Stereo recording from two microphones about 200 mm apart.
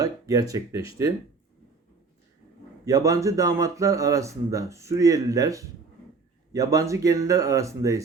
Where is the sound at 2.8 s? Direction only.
15° right (ahead or behind).